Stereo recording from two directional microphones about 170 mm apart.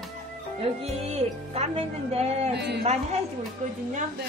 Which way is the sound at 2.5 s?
80° right.